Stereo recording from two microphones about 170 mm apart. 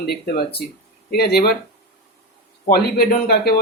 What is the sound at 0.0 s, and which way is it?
Speech, 65° left (ahead or behind).